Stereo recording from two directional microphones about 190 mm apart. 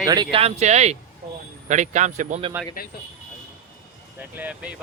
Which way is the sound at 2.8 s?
50° left (ahead or behind).